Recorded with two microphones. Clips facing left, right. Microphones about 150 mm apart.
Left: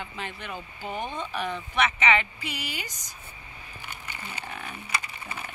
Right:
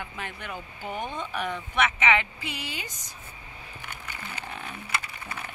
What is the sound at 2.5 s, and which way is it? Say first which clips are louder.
Speech: left 1 dB; 25° right (ahead or behind).